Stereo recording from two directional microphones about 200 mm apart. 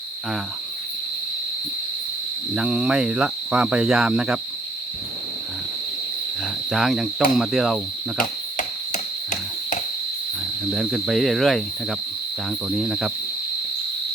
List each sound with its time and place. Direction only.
2.6 s cricket: 5° right (ahead or behind)
6.7 s cricket: centre (ahead or behind)
8.2 s cricket: 40° left (ahead or behind)
10.7 s cricket: centre (ahead or behind)